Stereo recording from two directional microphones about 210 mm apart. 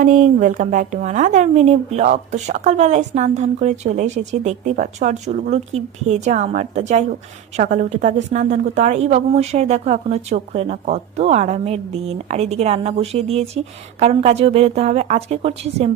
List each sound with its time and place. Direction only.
0.0 s speech: 40° right (ahead or behind)